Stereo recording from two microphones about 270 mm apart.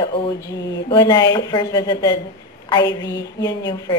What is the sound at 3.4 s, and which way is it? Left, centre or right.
Speech, centre.